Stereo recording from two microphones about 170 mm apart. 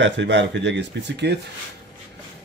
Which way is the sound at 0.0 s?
90° right.